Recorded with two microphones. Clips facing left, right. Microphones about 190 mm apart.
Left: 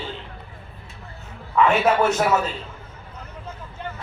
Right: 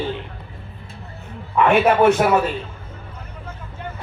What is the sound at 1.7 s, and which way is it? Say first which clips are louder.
Speech: right 7 dB; 60° right (ahead or behind).